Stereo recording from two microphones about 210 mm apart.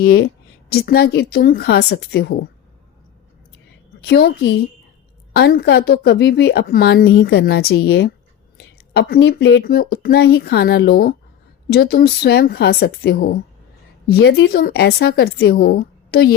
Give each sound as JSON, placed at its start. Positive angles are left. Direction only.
{"t": 0.0, "sound": "a woman's voice", "side_deg": 50}
{"t": 4.0, "sound": "a woman's voice", "side_deg": 50}